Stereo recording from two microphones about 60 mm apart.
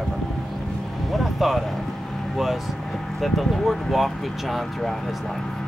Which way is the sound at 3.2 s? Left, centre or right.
Centre.